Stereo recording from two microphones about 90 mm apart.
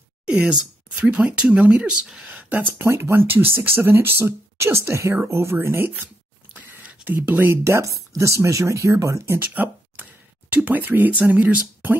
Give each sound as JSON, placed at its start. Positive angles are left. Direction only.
{"t": 0.3, "sound": "speech", "side_deg": -10}
{"t": 6.5, "sound": "a sound", "side_deg": -15}
{"t": 7.2, "sound": "speech", "side_deg": -25}
{"t": 7.6, "sound": "speech", "side_deg": -35}